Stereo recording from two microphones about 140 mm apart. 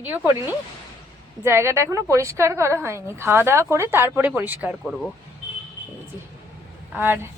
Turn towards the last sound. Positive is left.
turn(degrees=-15)  # may be behind; listen again after turning